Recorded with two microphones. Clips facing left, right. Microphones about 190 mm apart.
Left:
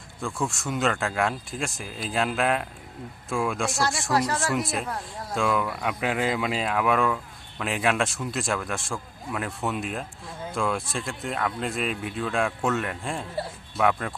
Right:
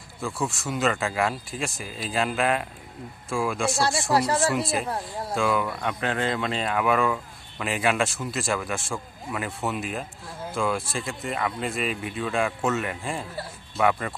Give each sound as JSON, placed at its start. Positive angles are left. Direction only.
{"t": 0.2, "sound": "speech", "side_deg": -5}
{"t": 3.8, "sound": "speech", "side_deg": -30}
{"t": 4.5, "sound": "speech", "side_deg": 0}